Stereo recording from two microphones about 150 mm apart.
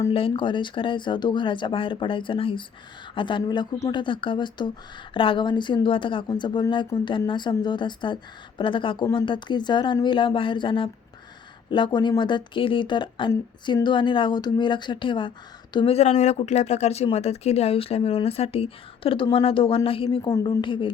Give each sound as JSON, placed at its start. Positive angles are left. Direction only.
{"t": 0.1, "sound": "speech", "side_deg": 35}
{"t": 20.3, "sound": "speech", "side_deg": 25}